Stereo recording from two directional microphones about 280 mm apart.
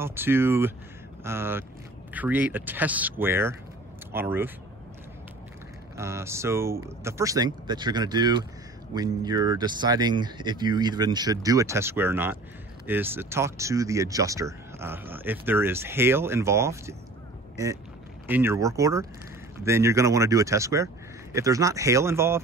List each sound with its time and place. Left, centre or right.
0.0 s speech: centre
5.9 s speech: centre
18.2 s speech: centre